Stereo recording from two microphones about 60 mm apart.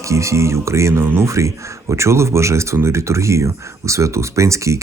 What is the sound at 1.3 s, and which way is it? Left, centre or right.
Speech, right.